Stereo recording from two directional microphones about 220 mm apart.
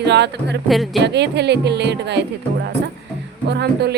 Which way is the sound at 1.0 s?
50° right (ahead or behind).